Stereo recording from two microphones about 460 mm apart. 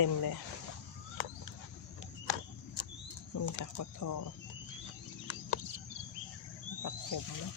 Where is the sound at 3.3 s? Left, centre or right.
Left.